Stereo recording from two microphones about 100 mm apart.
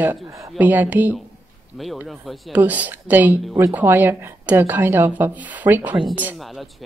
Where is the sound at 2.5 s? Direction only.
15° right (ahead or behind).